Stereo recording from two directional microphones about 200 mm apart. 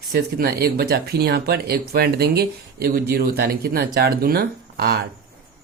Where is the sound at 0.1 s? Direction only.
50° right (ahead or behind).